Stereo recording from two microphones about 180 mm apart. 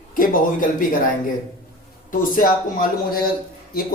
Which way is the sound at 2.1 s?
50° left (ahead or behind).